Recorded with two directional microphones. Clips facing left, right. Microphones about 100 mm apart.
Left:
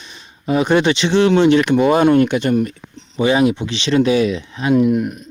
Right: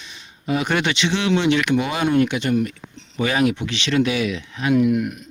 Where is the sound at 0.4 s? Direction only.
30° left (ahead or behind).